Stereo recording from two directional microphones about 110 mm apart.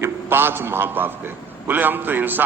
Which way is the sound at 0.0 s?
20° right (ahead or behind).